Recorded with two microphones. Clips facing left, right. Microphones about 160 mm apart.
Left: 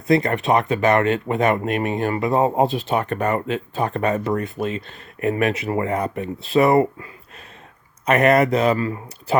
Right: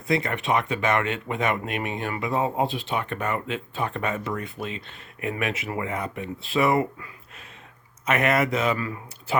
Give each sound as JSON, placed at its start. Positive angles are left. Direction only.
{"t": 0.1, "sound": "speech", "side_deg": 35}